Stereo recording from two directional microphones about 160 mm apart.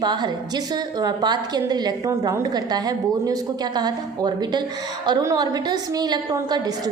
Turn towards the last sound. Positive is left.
turn(degrees=-25)  # may be behind; listen again after turning